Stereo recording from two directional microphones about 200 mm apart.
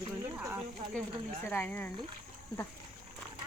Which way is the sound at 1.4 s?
10° left (ahead or behind).